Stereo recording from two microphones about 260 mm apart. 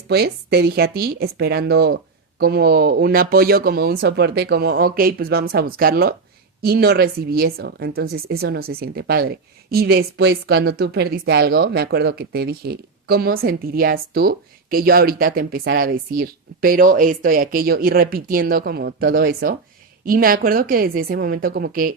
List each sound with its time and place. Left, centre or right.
0.1 s a woman's voice: right